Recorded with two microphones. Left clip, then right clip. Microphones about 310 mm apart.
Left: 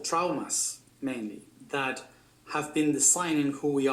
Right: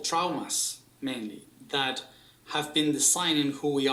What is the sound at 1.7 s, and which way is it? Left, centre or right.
Speech, centre.